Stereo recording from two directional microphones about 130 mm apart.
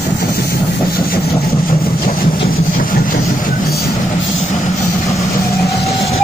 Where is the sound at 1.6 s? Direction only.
90° left.